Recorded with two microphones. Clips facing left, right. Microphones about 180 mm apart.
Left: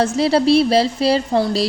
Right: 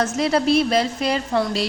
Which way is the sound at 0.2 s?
35° left (ahead or behind).